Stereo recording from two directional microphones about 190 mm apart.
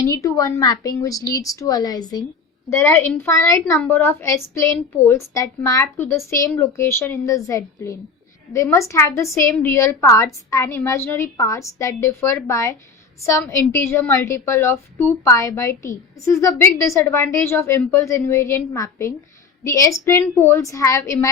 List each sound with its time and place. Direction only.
0.0 s a woman's voice: 15° left (ahead or behind)